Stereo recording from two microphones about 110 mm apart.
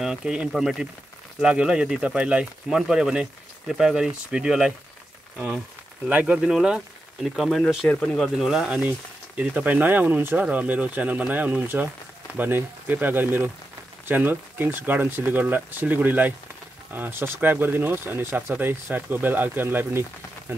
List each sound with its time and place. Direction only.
0.0 s speech: 5° right (ahead or behind)
6.0 s speech: 10° right (ahead or behind)